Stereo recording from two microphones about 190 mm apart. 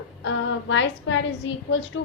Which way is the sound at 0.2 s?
80° left.